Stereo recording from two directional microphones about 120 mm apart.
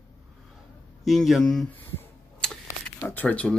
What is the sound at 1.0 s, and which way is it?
Speech, centre (ahead or behind).